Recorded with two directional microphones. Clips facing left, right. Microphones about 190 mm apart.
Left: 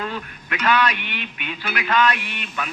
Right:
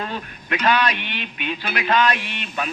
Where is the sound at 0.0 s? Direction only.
30° right (ahead or behind).